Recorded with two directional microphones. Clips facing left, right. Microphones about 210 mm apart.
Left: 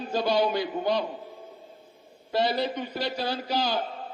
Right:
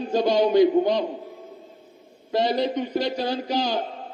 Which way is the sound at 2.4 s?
15° right (ahead or behind).